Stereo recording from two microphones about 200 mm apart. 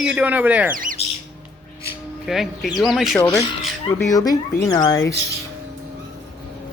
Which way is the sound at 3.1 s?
15° left (ahead or behind).